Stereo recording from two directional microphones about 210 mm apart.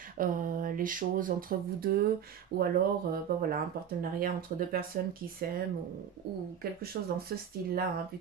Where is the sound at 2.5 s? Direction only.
50° right (ahead or behind).